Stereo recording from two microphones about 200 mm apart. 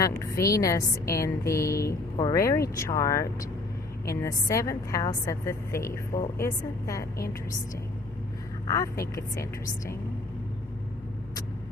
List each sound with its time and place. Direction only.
0.0 s a woman's voice: 15° left (ahead or behind)
8.7 s a woman's voice: 15° left (ahead or behind)